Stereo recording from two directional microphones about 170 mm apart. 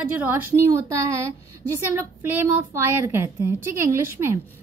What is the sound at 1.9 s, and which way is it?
A woman's voice, 15° right (ahead or behind).